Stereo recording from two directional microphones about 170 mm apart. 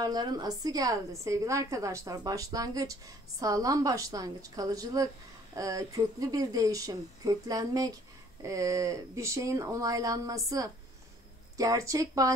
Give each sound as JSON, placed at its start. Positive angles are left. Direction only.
{"t": 0.0, "sound": "a woman's voice", "side_deg": -25}